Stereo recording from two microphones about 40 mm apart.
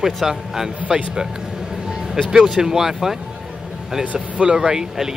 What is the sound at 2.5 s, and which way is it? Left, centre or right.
Speech, centre.